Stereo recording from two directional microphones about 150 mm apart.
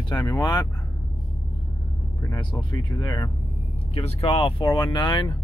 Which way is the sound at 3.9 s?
40° left (ahead or behind).